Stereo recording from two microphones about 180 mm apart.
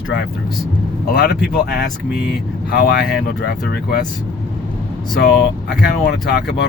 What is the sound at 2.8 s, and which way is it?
Speech, 60° left (ahead or behind).